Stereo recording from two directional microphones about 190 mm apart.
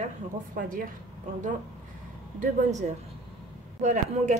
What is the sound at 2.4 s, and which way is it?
A woman's voice, 40° right (ahead or behind).